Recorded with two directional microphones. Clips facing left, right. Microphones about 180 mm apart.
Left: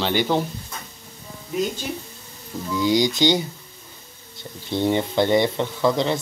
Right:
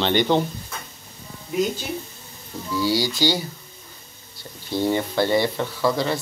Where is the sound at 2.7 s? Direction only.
20° left (ahead or behind).